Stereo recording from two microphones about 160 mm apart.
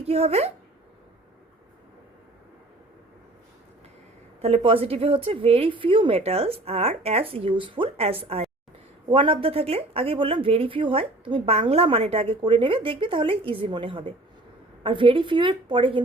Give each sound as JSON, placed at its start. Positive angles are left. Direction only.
{"t": 0.0, "sound": "speech", "side_deg": -40}
{"t": 4.4, "sound": "speech", "side_deg": -35}